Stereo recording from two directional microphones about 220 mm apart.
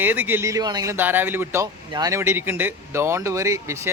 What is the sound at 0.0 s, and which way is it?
Speech, 10° right (ahead or behind).